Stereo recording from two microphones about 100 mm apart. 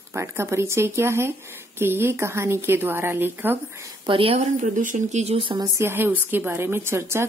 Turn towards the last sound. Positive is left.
turn(degrees=-25)  # may be behind; listen again after turning